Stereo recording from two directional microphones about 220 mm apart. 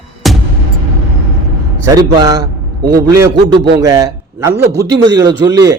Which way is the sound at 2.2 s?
15° right (ahead or behind).